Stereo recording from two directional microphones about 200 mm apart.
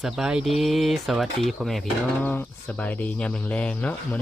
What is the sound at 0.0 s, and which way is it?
Speech, 5° right (ahead or behind).